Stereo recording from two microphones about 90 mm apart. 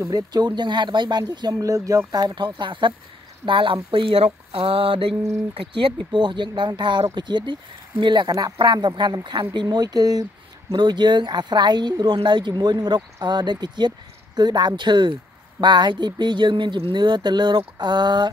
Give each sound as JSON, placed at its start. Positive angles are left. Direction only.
{"t": 0.0, "sound": "speech", "side_deg": -45}
{"t": 1.6, "sound": "speech", "side_deg": -40}
{"t": 2.1, "sound": "speech", "side_deg": -55}
{"t": 3.4, "sound": "a sound", "side_deg": -70}
{"t": 5.5, "sound": "speech", "side_deg": -75}